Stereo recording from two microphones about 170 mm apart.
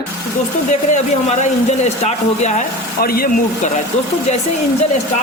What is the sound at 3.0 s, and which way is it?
Speech, 60° left (ahead or behind).